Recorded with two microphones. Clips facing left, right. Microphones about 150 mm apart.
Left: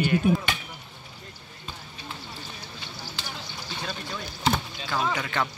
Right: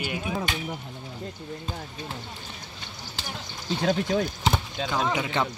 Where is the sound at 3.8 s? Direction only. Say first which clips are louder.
Right 14 dB; 90° right.